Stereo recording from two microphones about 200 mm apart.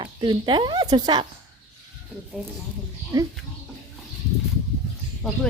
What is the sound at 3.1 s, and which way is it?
Speech, 15° right (ahead or behind).